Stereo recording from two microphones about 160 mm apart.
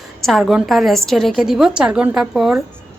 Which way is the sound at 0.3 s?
Centre (ahead or behind).